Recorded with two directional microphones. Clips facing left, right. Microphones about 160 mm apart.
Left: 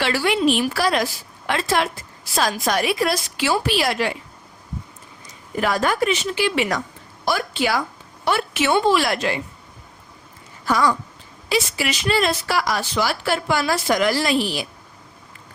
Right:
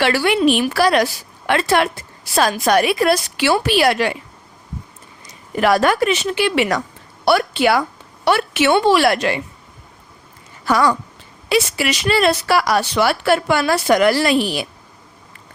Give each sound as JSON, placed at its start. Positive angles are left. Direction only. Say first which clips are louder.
{"t": 0.0, "sound": "speech", "louder": "right 4 dB", "side_deg": -65}
{"t": 5.5, "sound": "speech", "louder": "right 5 dB", "side_deg": -70}
{"t": 10.7, "sound": "speech", "louder": "right 3 dB", "side_deg": -65}